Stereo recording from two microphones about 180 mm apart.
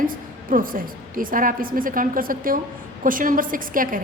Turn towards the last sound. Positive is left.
turn(degrees=-50)  # may be behind; listen again after turning